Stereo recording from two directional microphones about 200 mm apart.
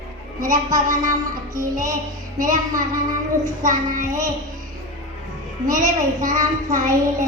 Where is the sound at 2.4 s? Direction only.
40° right (ahead or behind).